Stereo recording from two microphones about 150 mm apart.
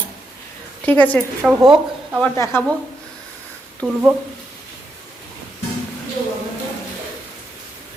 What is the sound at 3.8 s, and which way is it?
Speech, centre (ahead or behind).